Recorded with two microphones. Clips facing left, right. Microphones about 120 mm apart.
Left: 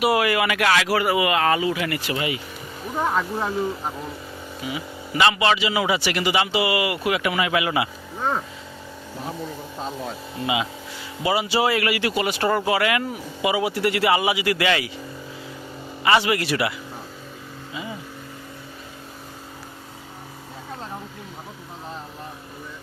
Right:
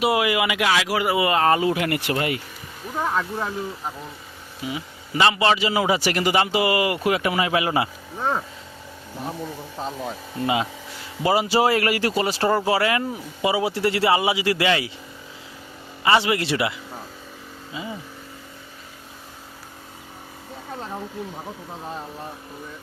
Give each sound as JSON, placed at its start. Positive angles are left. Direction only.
{"t": 0.0, "sound": "speech", "side_deg": -20}
{"t": 1.1, "sound": "a man's voice", "side_deg": -30}
{"t": 1.6, "sound": "speech", "side_deg": -55}
{"t": 2.9, "sound": "speech", "side_deg": 5}
{"t": 4.7, "sound": "a man's voice", "side_deg": -30}
{"t": 8.2, "sound": "speech", "side_deg": 0}
{"t": 11.3, "sound": "speech", "side_deg": -40}
{"t": 16.0, "sound": "speech", "side_deg": -25}